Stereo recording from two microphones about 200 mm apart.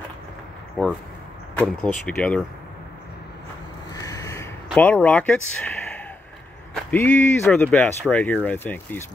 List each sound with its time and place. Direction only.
0.8 s speech: 5° left (ahead or behind)
3.9 s a sound: 15° left (ahead or behind)
4.6 s speech: 5° left (ahead or behind)
6.7 s speech: 10° left (ahead or behind)